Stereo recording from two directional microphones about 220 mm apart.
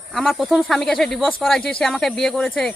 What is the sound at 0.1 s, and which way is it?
Speech, centre (ahead or behind).